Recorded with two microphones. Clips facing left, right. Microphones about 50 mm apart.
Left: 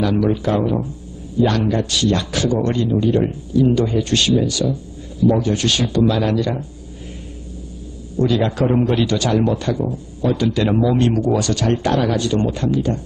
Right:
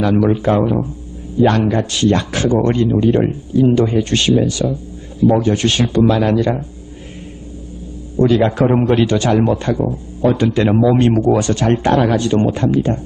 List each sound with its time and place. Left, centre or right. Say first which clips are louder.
0.0 s speech: right 4 dB; right
8.1 s a man's voice: right 5 dB; right
11.0 s speech: right 4 dB; right